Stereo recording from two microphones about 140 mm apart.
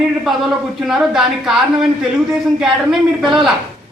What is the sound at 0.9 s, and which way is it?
Speech, 5° right (ahead or behind).